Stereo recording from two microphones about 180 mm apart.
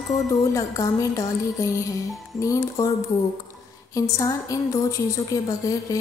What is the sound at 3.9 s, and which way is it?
A woman's voice, 20° left (ahead or behind).